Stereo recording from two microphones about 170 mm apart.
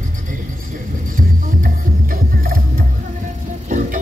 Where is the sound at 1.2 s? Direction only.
60° right (ahead or behind).